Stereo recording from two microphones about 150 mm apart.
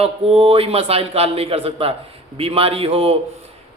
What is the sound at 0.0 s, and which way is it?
Speech, 35° right (ahead or behind).